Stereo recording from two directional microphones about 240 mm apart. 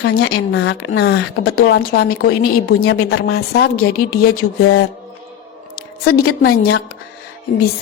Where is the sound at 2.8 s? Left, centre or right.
Left.